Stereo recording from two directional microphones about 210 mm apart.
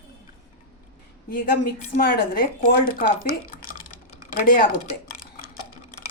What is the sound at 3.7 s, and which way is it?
Water, 40° left (ahead or behind).